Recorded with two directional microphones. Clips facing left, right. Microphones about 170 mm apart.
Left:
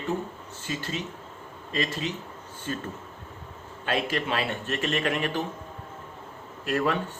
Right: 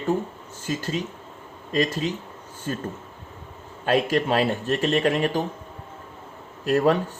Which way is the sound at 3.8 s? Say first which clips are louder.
Right 7 dB; 40° right (ahead or behind).